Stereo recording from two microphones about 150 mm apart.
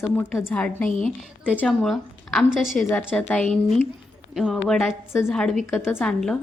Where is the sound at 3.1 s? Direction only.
10° left (ahead or behind).